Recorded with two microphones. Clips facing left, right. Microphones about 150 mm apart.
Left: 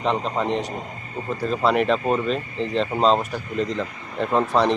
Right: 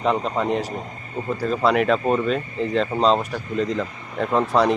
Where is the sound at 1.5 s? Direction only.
Centre (ahead or behind).